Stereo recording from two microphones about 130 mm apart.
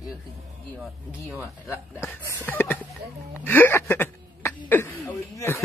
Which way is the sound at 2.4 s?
15° left (ahead or behind).